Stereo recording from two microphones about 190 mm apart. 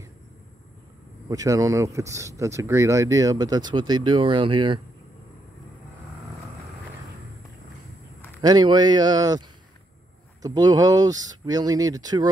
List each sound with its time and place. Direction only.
1.3 s speech: 20° right (ahead or behind)
8.4 s speech: 20° right (ahead or behind)
10.4 s speech: 20° right (ahead or behind)